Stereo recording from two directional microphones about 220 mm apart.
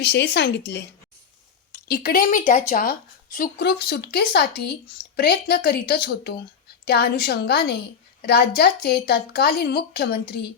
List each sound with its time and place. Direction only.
0.0 s speech: 50° left (ahead or behind)